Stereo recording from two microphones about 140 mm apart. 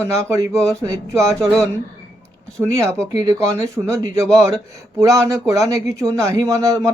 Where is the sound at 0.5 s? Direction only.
5° left (ahead or behind).